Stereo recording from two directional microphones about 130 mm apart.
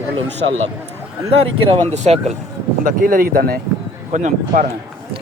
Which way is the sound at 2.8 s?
90° right.